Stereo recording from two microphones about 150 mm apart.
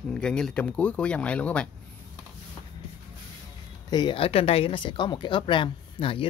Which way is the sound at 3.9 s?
35° left (ahead or behind).